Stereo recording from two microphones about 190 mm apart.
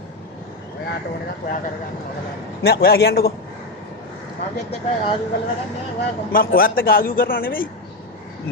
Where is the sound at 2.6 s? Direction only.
55° left (ahead or behind).